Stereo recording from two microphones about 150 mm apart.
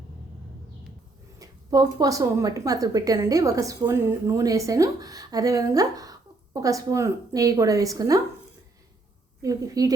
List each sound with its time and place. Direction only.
1.4 s a woman's voice: 25° right (ahead or behind)
9.4 s a woman's voice: 25° right (ahead or behind)